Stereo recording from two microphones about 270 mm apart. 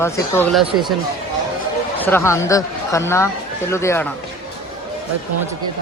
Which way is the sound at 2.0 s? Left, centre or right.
Centre.